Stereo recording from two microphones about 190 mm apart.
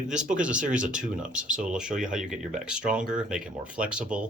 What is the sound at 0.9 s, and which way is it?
Speech, 40° right (ahead or behind).